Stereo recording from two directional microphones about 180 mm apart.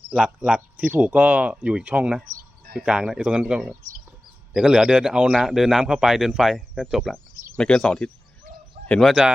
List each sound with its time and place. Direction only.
0.1 s speech: 5° right (ahead or behind)
2.2 s a sound: 50° right (ahead or behind)
2.7 s speech: 5° right (ahead or behind)